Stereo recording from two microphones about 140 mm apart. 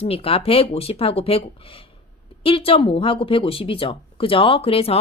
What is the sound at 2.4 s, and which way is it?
Speech, 40° left (ahead or behind).